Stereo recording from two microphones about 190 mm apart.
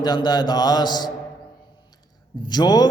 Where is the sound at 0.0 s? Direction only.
20° left (ahead or behind).